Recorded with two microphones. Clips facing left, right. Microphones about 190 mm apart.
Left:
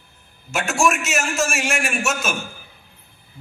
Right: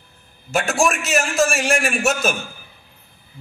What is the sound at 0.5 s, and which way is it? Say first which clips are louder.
A man's voice: right 1 dB; 35° right (ahead or behind).